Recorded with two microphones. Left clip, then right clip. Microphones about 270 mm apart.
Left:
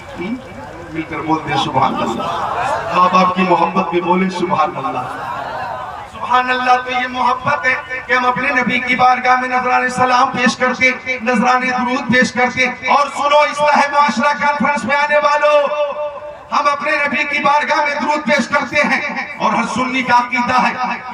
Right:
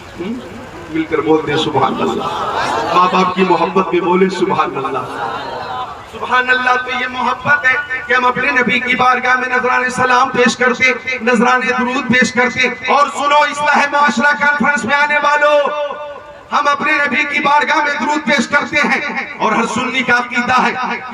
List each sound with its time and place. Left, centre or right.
1.3 s a man's voice: centre
3.0 s a man's voice: centre
6.3 s a man's voice: centre